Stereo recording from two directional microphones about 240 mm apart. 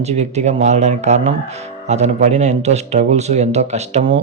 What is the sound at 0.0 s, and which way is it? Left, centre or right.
Speech, right.